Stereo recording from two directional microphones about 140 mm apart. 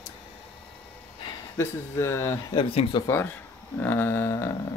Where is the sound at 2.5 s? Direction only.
40° left (ahead or behind).